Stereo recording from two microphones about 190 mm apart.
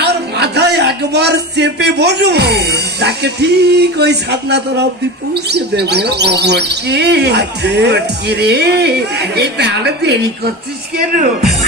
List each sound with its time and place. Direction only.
0.0 s speech: 60° right (ahead or behind)